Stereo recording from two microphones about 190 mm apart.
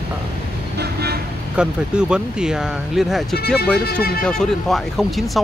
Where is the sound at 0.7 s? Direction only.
60° right (ahead or behind).